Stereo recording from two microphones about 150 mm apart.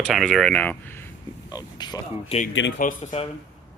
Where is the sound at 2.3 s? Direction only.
55° left (ahead or behind).